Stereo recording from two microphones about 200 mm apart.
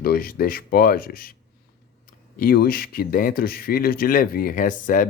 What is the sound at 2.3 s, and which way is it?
Speech, 50° left (ahead or behind).